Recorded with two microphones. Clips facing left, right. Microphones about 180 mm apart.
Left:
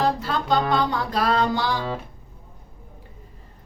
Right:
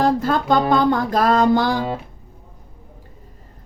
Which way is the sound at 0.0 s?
50° right (ahead or behind).